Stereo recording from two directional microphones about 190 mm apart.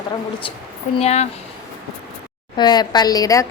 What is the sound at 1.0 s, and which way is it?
Speech, 35° left (ahead or behind).